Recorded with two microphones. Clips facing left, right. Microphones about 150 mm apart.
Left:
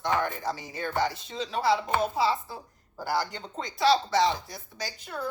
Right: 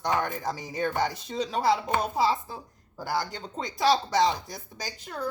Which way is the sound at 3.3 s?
45° right (ahead or behind).